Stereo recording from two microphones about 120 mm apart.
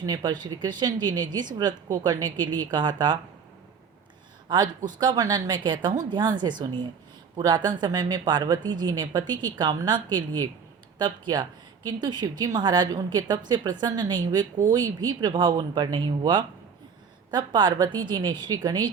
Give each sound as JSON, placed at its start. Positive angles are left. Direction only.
{"t": 0.0, "sound": "a woman's voice", "side_deg": -35}
{"t": 4.4, "sound": "a woman's voice", "side_deg": -40}